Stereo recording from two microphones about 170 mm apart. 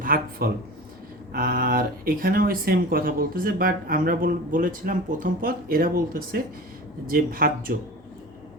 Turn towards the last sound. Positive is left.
turn(degrees=-60)  # may be behind; listen again after turning